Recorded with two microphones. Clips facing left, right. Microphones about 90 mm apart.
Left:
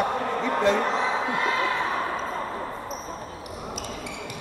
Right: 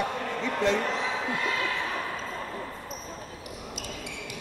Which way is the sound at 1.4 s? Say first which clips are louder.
Left 5 dB; 40° left (ahead or behind).